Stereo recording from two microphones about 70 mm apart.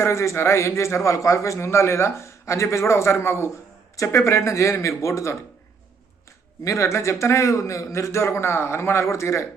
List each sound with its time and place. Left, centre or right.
0.0 s a man's voice: left
6.7 s a man's voice: left